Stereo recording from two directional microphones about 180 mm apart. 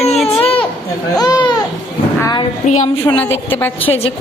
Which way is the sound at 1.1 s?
20° left (ahead or behind).